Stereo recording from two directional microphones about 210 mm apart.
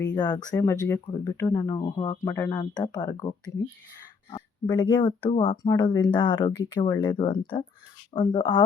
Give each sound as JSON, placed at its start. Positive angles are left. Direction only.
{"t": 0.1, "sound": "speech", "side_deg": 20}